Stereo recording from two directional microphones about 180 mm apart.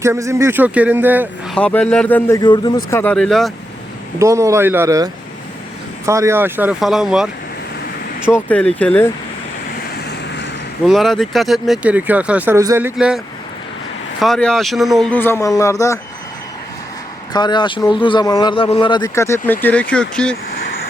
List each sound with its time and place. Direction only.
0.0 s speech: 15° right (ahead or behind)
1.5 s speech: 5° left (ahead or behind)
2.4 s speech: 25° left (ahead or behind); by 3.5 s centre (ahead or behind)
4.2 s speech: 15° right (ahead or behind)
8.3 s speech: 5° left (ahead or behind)
10.8 s speech: centre (ahead or behind); by 16.0 s 15° left (ahead or behind)
17.3 s speech: 25° left (ahead or behind); by 20.3 s 5° left (ahead or behind)